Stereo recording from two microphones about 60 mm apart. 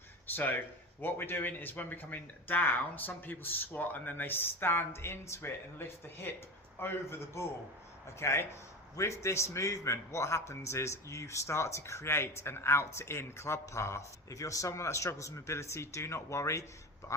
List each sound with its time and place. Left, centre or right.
0.3 s a man's voice: left